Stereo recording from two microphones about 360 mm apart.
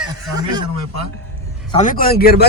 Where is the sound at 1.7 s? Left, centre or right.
Left.